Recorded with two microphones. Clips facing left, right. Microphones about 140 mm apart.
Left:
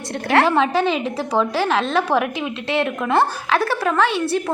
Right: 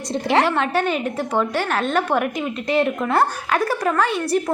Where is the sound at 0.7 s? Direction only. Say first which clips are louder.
Left 1 dB; 90° left.